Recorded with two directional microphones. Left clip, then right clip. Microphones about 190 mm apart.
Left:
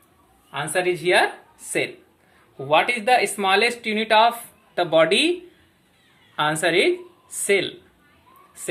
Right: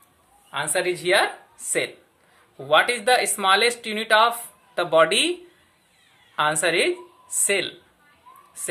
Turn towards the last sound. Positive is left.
turn(degrees=-10)  # may be behind; listen again after turning